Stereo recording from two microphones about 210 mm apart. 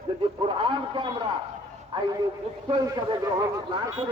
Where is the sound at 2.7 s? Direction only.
20° right (ahead or behind).